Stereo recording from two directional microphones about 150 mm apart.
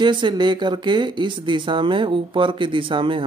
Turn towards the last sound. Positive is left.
turn(degrees=-35)  # may be behind; listen again after turning